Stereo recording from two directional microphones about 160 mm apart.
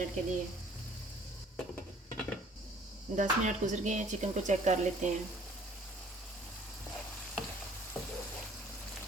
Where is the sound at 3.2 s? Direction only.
50° right (ahead or behind).